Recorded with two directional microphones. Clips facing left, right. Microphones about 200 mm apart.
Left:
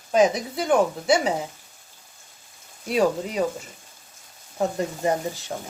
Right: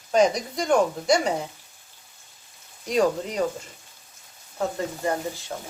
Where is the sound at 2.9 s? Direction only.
5° left (ahead or behind).